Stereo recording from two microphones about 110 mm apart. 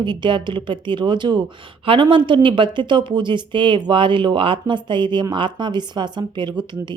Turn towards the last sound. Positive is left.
turn(degrees=-45)  # may be behind; listen again after turning